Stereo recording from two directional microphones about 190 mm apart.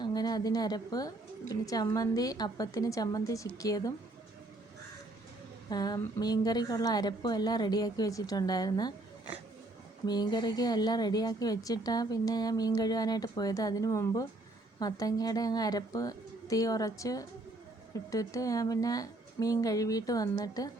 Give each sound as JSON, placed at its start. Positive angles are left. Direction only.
{"t": 0.0, "sound": "a woman's voice", "side_deg": 20}
{"t": 5.6, "sound": "a woman's voice", "side_deg": 20}
{"t": 10.1, "sound": "a woman's voice", "side_deg": 20}